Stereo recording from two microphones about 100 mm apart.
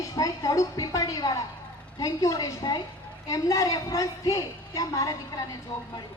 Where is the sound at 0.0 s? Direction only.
35° left (ahead or behind).